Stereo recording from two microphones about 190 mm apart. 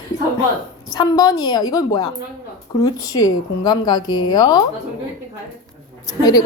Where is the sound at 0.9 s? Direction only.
20° left (ahead or behind).